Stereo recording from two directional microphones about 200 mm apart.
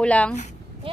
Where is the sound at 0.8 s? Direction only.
25° right (ahead or behind).